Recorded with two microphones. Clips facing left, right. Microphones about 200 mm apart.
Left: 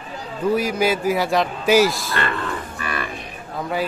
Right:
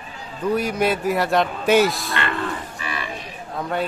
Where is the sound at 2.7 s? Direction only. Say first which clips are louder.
Left 3 dB; 55° left (ahead or behind).